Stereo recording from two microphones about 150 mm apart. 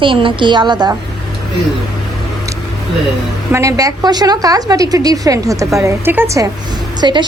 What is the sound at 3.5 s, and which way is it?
A woman's voice, 20° right (ahead or behind).